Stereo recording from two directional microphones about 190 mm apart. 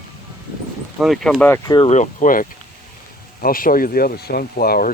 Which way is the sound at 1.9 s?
40° left (ahead or behind).